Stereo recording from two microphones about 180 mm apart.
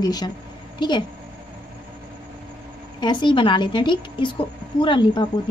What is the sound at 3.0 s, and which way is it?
A woman's voice, 25° left (ahead or behind).